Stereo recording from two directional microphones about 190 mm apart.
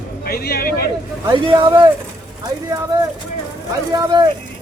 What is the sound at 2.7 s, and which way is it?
Speech, 15° right (ahead or behind).